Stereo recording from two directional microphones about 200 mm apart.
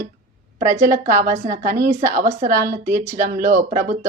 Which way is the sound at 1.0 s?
40° right (ahead or behind).